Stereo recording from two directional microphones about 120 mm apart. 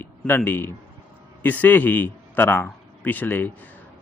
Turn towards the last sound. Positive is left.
turn(degrees=15)  # may be behind; listen again after turning